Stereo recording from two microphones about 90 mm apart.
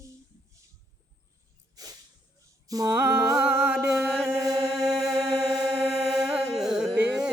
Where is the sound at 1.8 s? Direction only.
45° right (ahead or behind).